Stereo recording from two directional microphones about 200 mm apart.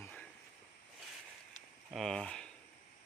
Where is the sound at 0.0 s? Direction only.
5° left (ahead or behind).